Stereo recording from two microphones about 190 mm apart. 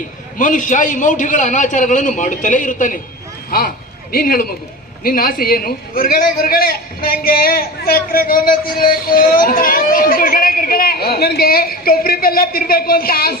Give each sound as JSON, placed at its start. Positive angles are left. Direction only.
{"t": 0.3, "sound": "a man's voice", "side_deg": 45}
{"t": 4.1, "sound": "a man's voice", "side_deg": 50}